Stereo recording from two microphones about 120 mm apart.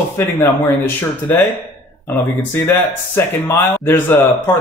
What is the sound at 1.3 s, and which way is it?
Speech, 20° left (ahead or behind).